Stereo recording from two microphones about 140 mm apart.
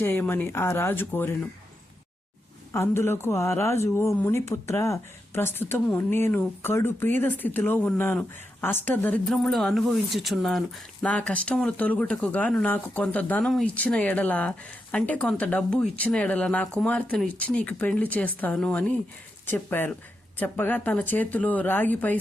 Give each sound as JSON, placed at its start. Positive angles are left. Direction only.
{"t": 0.0, "sound": "speech", "side_deg": 15}
{"t": 2.7, "sound": "speech", "side_deg": 20}
{"t": 9.3, "sound": "speech", "side_deg": 0}